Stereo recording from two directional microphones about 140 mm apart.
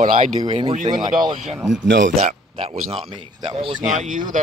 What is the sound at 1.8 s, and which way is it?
Speech, 55° right (ahead or behind).